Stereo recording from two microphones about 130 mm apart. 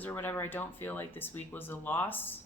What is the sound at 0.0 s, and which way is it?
Speech, 15° left (ahead or behind).